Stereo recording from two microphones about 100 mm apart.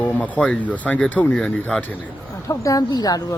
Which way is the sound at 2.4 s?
35° left (ahead or behind).